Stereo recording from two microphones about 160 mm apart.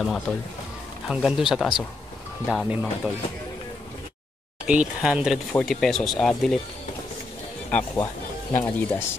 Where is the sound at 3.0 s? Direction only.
5° right (ahead or behind).